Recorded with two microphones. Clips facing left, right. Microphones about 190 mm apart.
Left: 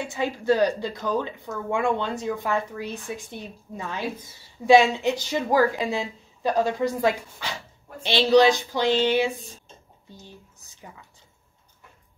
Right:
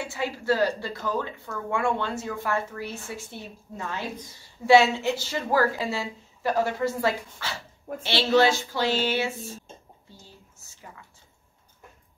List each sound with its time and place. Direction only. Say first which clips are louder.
0.0 s speech: left 3 dB; 20° left (ahead or behind)